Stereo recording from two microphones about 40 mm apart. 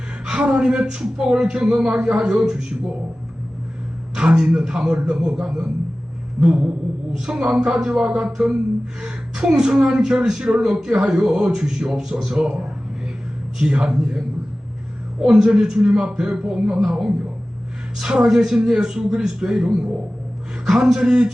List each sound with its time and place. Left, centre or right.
0.3 s a man's voice: right
4.1 s a man's voice: right
11.4 s a man's voice: centre
15.2 s a man's voice: centre
17.9 s a man's voice: centre